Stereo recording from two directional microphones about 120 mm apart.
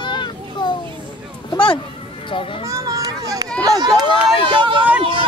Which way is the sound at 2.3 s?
45° left (ahead or behind).